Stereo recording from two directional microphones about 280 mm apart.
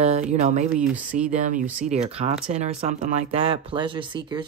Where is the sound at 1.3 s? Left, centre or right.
Right.